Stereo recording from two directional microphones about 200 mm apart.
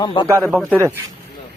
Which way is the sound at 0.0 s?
25° left (ahead or behind).